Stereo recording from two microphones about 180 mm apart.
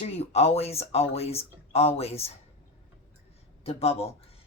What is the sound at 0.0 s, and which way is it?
Speech, 35° left (ahead or behind).